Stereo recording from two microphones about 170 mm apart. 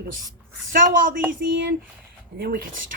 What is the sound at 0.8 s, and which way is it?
Speech, 55° right (ahead or behind).